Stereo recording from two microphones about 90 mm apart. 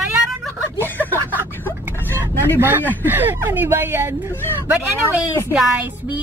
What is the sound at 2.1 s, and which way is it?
Vehicle, 25° right (ahead or behind).